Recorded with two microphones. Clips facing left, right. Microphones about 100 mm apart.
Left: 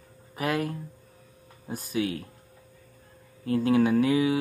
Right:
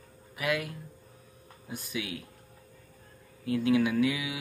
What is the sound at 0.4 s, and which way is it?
Speech, 40° left (ahead or behind).